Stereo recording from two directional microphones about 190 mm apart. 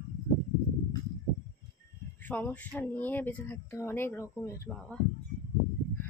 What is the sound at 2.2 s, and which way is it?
Speech, 10° left (ahead or behind).